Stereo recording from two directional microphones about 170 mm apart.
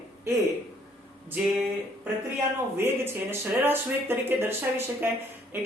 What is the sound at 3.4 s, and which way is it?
Speech, 15° right (ahead or behind).